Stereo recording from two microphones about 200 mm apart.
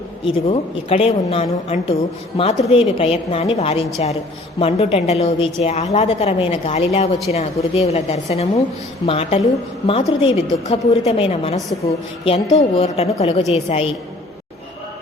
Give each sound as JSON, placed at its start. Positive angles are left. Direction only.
{"t": 0.3, "sound": "a woman's voice", "side_deg": 30}